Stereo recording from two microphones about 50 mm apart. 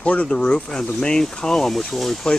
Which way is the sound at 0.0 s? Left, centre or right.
Left.